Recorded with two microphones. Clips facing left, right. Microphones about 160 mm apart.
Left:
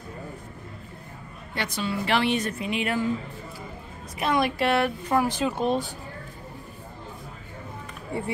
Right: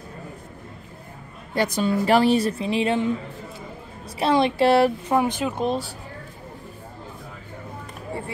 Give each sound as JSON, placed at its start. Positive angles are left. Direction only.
{"t": 1.5, "sound": "a woman's voice", "side_deg": -40}
{"t": 4.2, "sound": "speech", "side_deg": -30}
{"t": 5.1, "sound": "speech", "side_deg": -20}
{"t": 5.5, "sound": "speech", "side_deg": 5}